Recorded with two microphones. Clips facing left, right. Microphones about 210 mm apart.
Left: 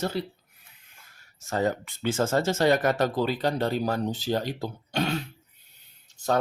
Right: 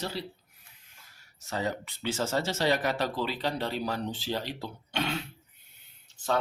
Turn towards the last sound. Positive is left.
turn(degrees=40)  # may be behind; listen again after turning